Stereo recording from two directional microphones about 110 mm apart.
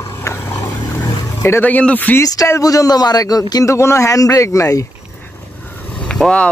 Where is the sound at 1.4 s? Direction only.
20° left (ahead or behind).